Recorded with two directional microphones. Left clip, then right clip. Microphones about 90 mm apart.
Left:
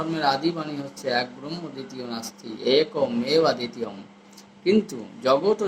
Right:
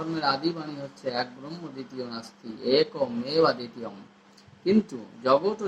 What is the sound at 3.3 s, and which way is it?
Speech, 5° right (ahead or behind).